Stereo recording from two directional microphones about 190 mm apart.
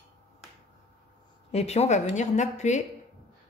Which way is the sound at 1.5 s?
35° left (ahead or behind).